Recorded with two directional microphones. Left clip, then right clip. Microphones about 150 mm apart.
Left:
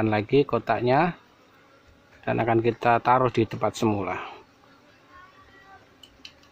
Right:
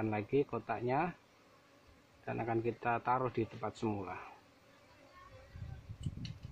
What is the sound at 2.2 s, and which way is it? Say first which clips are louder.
Speech: left 14 dB; 20° left (ahead or behind).